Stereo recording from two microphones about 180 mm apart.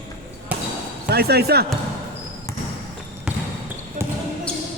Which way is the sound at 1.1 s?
60° right (ahead or behind).